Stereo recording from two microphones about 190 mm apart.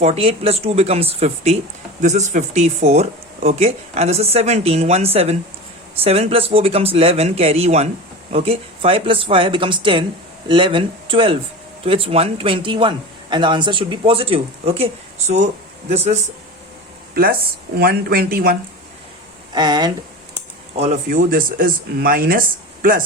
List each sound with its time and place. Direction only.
0.0 s speech: 30° right (ahead or behind)
15.9 s speech: 35° right (ahead or behind)
17.7 s speech: 50° right (ahead or behind)
19.5 s speech: 20° right (ahead or behind)
20.7 s speech: 35° right (ahead or behind)